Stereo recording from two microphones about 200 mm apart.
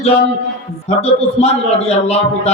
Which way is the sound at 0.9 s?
30° left (ahead or behind).